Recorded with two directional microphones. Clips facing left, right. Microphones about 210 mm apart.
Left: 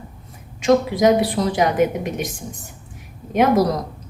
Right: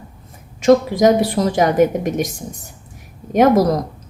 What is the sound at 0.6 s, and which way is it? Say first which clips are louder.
A woman's voice: right 3 dB; 45° right (ahead or behind).